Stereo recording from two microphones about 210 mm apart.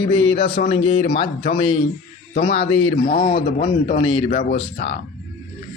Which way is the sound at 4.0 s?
25° left (ahead or behind).